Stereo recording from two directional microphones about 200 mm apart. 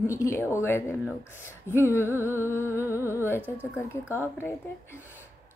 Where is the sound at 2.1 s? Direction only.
10° right (ahead or behind).